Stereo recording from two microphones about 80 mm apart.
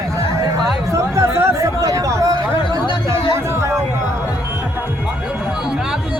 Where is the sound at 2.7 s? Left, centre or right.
Left.